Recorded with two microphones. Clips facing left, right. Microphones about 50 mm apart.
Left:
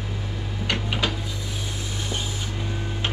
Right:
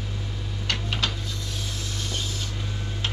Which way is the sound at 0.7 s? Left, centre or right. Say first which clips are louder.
Left 2 dB; centre.